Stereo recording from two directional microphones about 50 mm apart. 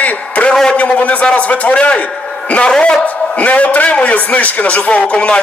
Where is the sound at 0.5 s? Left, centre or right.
Centre.